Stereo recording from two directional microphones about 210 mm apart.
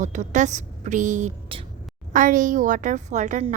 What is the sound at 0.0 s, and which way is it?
A woman's voice, 35° right (ahead or behind).